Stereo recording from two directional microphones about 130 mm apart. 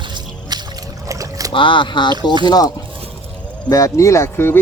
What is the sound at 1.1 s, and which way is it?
Boat, 25° right (ahead or behind).